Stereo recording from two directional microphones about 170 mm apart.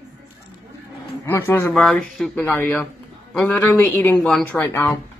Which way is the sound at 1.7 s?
Centre (ahead or behind).